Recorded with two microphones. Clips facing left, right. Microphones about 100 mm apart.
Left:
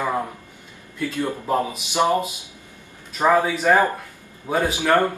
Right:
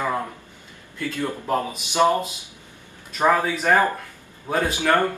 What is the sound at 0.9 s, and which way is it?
Speech, 15° left (ahead or behind).